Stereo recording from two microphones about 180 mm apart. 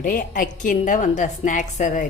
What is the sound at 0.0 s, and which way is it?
A woman's voice, 50° left (ahead or behind).